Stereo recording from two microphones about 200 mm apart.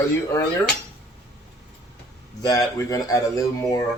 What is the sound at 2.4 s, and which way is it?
Speech, 15° left (ahead or behind).